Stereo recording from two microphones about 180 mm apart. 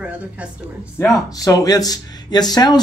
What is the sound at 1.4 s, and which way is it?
Speech, 20° left (ahead or behind).